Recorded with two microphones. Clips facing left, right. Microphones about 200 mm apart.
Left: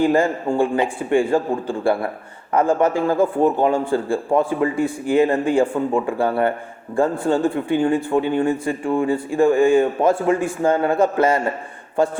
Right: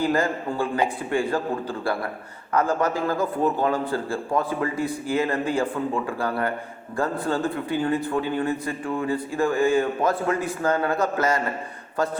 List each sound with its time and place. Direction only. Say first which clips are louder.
0.0 s a man's voice: left 6 dB; 30° left (ahead or behind)